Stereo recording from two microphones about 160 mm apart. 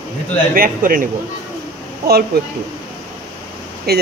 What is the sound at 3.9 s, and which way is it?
Speech, 85° right.